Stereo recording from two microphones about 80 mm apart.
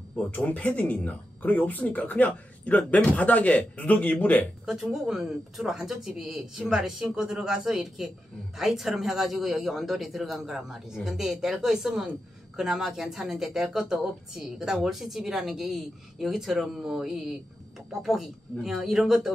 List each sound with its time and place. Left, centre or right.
0.3 s speech: centre
4.9 s a woman's voice: centre